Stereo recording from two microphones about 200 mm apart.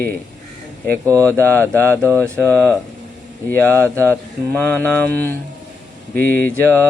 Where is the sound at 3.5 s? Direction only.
10° left (ahead or behind).